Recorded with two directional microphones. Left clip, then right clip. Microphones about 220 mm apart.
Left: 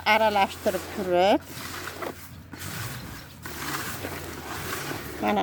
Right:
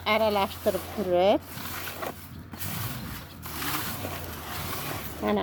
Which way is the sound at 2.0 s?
20° left (ahead or behind).